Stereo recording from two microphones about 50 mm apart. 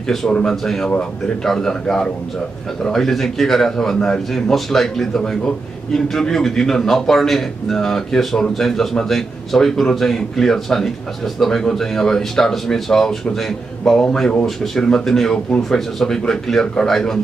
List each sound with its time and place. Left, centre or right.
0.3 s speech: left
1.4 s a man's voice: centre